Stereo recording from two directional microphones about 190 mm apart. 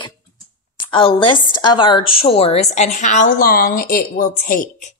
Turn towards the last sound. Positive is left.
turn(degrees=50)  # may be behind; listen again after turning